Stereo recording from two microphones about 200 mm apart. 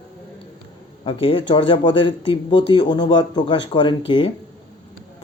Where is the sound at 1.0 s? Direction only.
25° left (ahead or behind).